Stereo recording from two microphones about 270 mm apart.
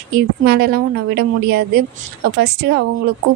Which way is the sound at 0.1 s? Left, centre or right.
Right.